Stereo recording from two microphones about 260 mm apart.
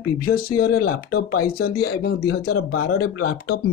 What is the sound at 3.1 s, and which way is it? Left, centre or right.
Speech, left.